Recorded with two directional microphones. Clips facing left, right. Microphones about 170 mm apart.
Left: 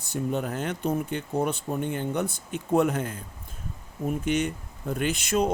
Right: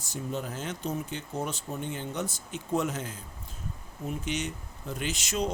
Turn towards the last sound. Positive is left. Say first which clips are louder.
# left 6 dB
turn(degrees=55)  # may be behind; listen again after turning